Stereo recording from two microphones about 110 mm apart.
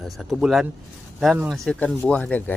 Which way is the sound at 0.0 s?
Centre (ahead or behind).